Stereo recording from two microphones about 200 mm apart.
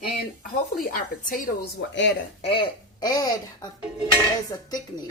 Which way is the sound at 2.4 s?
25° left (ahead or behind).